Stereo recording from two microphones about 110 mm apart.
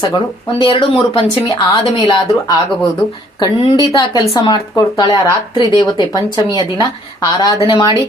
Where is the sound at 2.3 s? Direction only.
35° left (ahead or behind).